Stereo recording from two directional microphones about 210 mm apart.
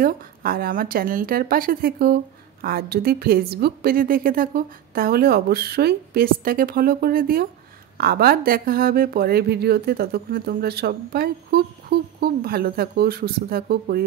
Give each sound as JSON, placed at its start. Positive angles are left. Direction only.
{"t": 0.0, "sound": "a woman's voice", "side_deg": -45}